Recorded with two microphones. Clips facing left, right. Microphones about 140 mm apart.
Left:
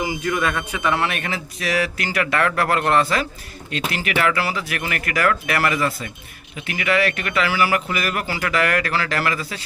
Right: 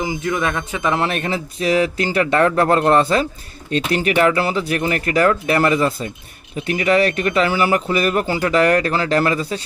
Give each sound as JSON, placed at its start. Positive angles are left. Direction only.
{"t": 0.0, "sound": "speech", "side_deg": -20}